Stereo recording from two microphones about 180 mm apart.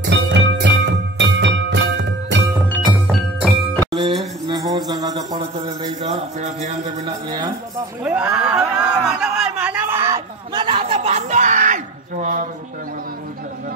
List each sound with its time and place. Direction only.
0.1 s music: 80° right
2.8 s music: centre (ahead or behind)
4.6 s mantra: 20° right (ahead or behind)
6.0 s a sound: 35° right (ahead or behind)
7.1 s speech: 20° right (ahead or behind)
8.0 s a sound: 10° right (ahead or behind); by 12.4 s 45° right (ahead or behind)